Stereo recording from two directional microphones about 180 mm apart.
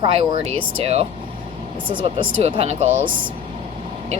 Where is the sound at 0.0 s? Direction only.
30° right (ahead or behind).